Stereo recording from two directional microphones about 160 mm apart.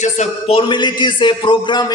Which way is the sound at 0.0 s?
45° left (ahead or behind).